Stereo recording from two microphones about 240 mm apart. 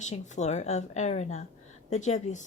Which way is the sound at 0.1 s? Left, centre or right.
Left.